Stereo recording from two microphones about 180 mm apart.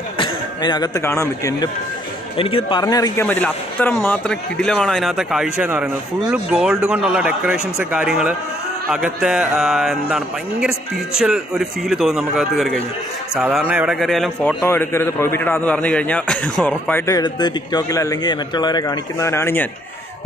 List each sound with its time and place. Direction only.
0.2 s speech: 25° left (ahead or behind)
2.3 s speech: 30° left (ahead or behind)
3.3 s speech: 10° left (ahead or behind)
14.6 s a man's voice: 15° left (ahead or behind)